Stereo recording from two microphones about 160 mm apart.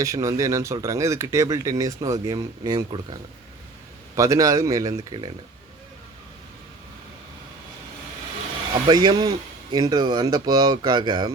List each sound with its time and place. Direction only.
0.0 s speech: 20° right (ahead or behind)
8.9 s speech: 25° right (ahead or behind)